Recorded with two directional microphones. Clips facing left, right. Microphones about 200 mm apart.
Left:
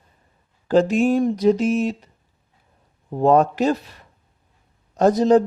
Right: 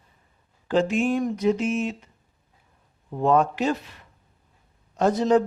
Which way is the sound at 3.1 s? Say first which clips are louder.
Left 5 dB; 35° left (ahead or behind).